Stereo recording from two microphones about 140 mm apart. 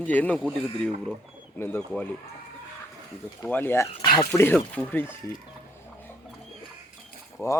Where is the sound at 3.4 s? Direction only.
15° left (ahead or behind).